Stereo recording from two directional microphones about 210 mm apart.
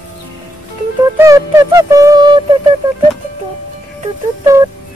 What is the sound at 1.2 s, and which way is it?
Music, 15° right (ahead or behind).